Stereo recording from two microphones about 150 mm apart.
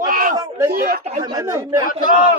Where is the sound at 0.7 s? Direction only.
80° right.